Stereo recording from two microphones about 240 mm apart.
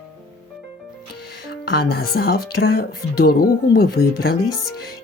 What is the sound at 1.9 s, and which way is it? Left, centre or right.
Speech, left.